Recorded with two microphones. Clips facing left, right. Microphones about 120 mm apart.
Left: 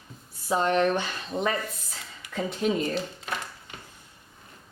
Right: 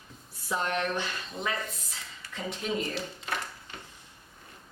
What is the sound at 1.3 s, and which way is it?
Speech, 55° left (ahead or behind).